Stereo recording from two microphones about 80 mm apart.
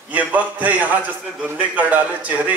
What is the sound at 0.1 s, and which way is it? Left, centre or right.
Speech, centre.